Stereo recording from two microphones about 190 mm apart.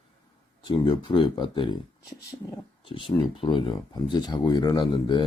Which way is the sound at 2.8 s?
25° left (ahead or behind).